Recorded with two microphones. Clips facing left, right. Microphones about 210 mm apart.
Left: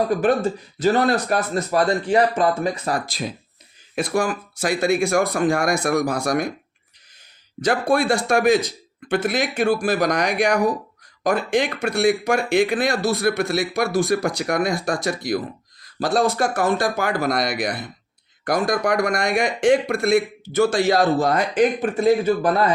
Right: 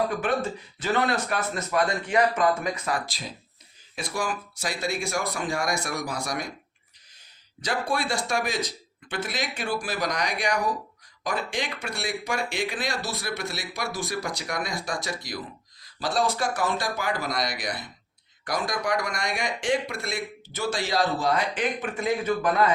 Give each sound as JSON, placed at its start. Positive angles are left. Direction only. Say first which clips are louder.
{"t": 0.1, "sound": "speech", "louder": "left 8 dB", "side_deg": 35}
{"t": 3.1, "sound": "speech", "louder": "left 10 dB", "side_deg": 55}
{"t": 7.6, "sound": "speech", "louder": "left 9 dB", "side_deg": 55}